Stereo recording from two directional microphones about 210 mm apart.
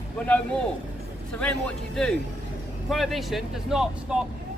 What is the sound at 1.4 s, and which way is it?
Speech, 5° left (ahead or behind).